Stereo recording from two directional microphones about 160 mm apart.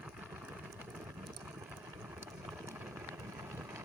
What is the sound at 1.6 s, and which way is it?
Vehicle, 10° right (ahead or behind).